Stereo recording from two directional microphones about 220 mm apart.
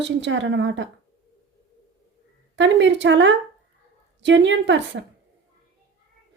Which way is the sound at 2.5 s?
55° right (ahead or behind).